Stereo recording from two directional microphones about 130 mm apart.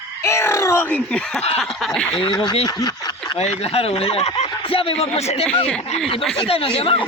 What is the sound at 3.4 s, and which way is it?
Speech, 55° left (ahead or behind).